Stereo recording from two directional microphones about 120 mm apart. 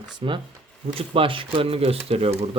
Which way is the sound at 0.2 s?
50° right (ahead or behind).